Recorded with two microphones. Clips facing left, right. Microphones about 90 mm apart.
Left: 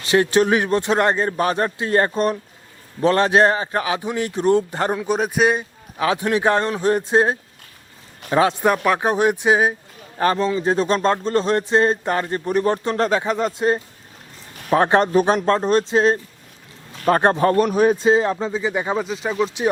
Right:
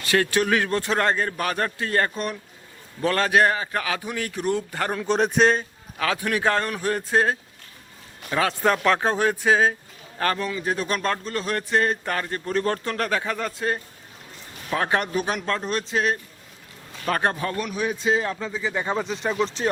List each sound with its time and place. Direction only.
0.0 s a man's voice: 20° left (ahead or behind)
14.7 s speech: 30° left (ahead or behind)
18.1 s speech: 25° left (ahead or behind); by 19.6 s 5° left (ahead or behind)